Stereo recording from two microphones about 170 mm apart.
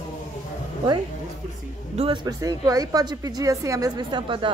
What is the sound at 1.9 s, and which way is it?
Speech, 35° right (ahead or behind).